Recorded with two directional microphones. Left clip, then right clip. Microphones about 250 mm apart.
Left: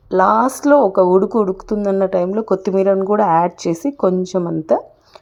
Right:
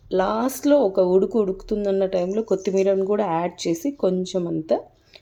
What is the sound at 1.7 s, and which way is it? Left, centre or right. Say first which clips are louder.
A woman's voice: left 5 dB; centre.